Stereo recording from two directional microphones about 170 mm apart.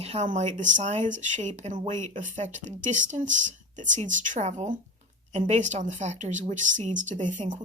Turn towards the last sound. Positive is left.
turn(degrees=-45)  # may be behind; listen again after turning